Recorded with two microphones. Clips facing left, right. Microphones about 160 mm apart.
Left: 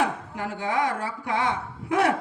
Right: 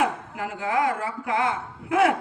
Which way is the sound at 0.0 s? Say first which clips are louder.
Right 1 dB; 30° left (ahead or behind).